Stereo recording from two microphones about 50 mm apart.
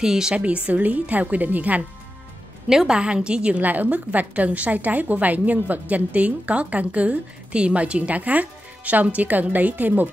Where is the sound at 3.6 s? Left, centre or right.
Right.